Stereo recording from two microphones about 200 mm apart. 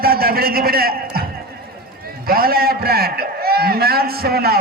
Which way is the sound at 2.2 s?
50° right (ahead or behind).